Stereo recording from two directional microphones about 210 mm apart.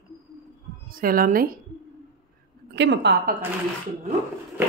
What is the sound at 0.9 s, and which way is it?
Speech, 45° right (ahead or behind).